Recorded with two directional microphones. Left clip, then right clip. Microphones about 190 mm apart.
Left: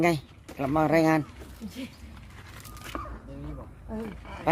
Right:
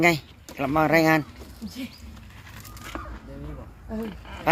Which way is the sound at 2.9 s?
35° left (ahead or behind).